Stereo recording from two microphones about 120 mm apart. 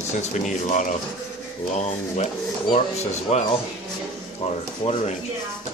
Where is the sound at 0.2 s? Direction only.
90° left.